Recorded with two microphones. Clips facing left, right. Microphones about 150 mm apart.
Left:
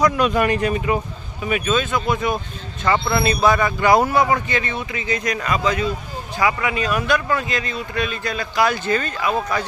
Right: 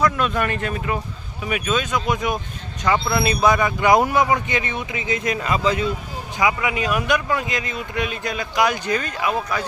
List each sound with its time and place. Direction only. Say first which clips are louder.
0.2 s speech: left 4 dB; 5° left (ahead or behind)
1.5 s speech: left 2 dB; 5° right (ahead or behind)